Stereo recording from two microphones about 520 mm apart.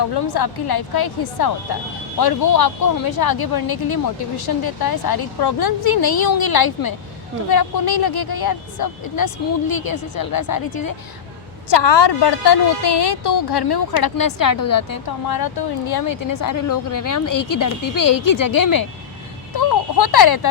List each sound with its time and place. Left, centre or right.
0.1 s speech: left
11.7 s a woman's voice: left